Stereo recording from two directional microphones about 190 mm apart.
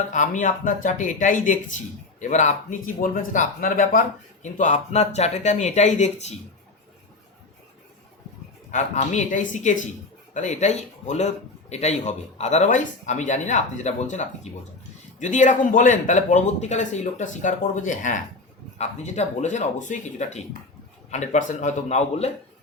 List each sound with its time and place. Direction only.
0.1 s speech: 40° left (ahead or behind)
8.7 s speech: 40° left (ahead or behind)